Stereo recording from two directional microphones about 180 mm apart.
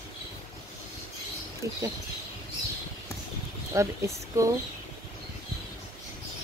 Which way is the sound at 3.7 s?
15° right (ahead or behind).